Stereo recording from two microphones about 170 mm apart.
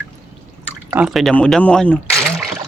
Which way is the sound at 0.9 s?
5° right (ahead or behind).